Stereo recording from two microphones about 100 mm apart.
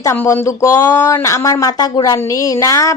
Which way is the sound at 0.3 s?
30° left (ahead or behind).